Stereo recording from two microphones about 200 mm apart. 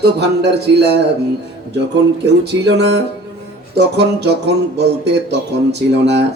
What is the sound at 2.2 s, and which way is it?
Music, 60° right (ahead or behind).